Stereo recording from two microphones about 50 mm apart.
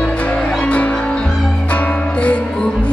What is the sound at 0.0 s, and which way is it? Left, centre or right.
Music, left.